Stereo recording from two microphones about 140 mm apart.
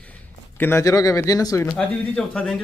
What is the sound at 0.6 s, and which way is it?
A man's voice, 20° left (ahead or behind).